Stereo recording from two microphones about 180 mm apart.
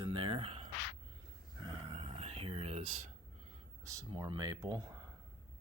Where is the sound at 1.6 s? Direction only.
30° right (ahead or behind).